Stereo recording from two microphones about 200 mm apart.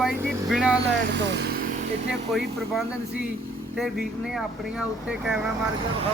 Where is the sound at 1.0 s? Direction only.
60° right (ahead or behind).